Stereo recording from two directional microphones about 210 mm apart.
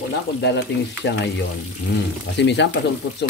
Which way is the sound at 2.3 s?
55° left (ahead or behind).